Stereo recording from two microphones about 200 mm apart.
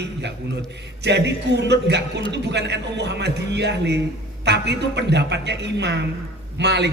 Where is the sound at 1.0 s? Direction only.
60° right (ahead or behind).